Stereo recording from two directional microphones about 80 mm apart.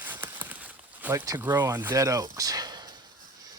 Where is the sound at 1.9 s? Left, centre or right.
Right.